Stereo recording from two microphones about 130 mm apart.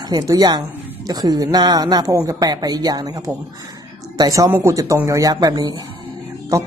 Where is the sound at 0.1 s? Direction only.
30° right (ahead or behind).